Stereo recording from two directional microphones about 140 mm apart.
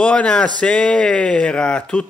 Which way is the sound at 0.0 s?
5° left (ahead or behind).